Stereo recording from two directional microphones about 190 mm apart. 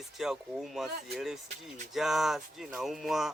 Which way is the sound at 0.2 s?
Centre (ahead or behind).